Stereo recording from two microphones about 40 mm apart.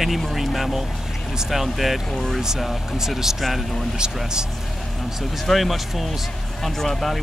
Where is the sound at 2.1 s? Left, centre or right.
Centre.